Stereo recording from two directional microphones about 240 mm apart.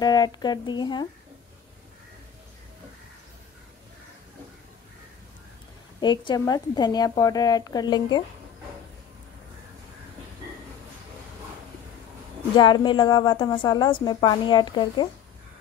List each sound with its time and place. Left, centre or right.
0.0 s speech: centre
5.9 s speech: centre
12.5 s a woman's voice: centre